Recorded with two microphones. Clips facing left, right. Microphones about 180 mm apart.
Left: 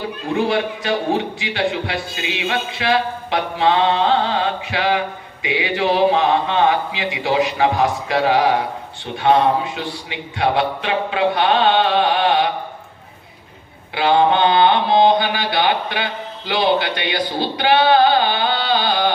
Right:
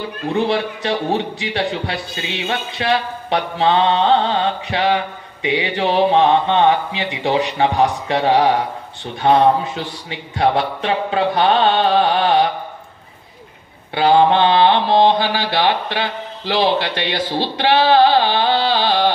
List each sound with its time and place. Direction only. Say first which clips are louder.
0.3 s a man's voice: even; 35° right (ahead or behind)
13.9 s a man's voice: right 2 dB; 35° right (ahead or behind)